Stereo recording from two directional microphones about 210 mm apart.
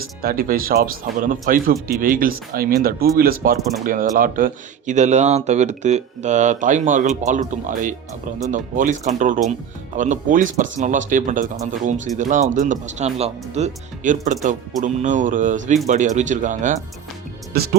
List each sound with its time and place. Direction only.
0.2 s speech: 45° right (ahead or behind)